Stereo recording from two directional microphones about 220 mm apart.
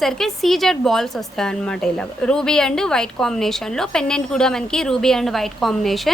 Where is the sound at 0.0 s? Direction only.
Centre (ahead or behind).